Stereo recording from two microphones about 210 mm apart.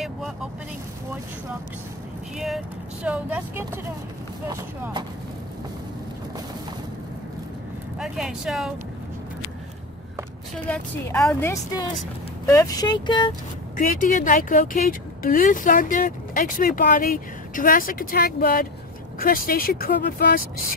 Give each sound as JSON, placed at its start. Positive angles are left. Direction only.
{"t": 2.3, "sound": "speech", "side_deg": 0}
{"t": 8.0, "sound": "speech", "side_deg": 0}
{"t": 10.7, "sound": "speech", "side_deg": 10}
{"t": 13.7, "sound": "speech", "side_deg": 35}